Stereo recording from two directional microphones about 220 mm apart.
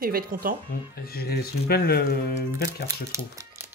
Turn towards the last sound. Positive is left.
turn(degrees=-15)  # may be behind; listen again after turning